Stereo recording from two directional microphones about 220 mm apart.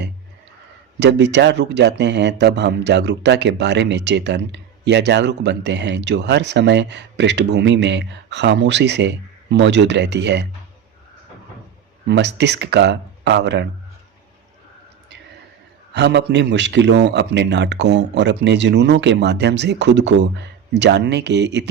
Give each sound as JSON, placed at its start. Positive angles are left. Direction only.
{"t": 0.9, "sound": "speech", "side_deg": -50}
{"t": 12.0, "sound": "speech", "side_deg": -50}
{"t": 15.9, "sound": "a man's voice", "side_deg": -50}